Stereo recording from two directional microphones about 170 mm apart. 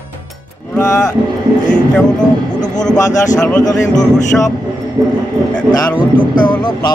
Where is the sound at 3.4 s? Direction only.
5° left (ahead or behind).